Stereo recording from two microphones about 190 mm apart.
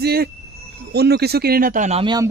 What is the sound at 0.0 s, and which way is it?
Speech, 55° right (ahead or behind).